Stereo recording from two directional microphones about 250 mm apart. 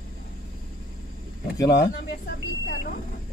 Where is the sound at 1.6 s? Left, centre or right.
Centre.